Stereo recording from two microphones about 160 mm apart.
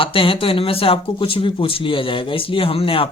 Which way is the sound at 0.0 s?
35° left (ahead or behind).